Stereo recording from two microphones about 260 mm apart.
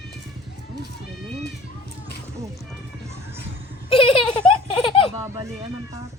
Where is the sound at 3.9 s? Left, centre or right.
Centre.